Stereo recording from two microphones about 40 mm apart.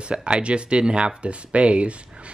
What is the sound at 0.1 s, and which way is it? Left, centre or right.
Speech, right.